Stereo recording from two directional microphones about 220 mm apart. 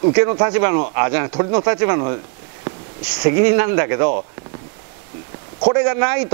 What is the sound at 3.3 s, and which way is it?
Speech, 15° right (ahead or behind).